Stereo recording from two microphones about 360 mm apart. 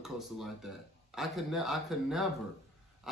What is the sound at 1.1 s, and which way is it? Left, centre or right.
Speech, centre.